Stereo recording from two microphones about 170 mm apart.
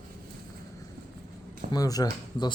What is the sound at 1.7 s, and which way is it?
Speech, 20° left (ahead or behind).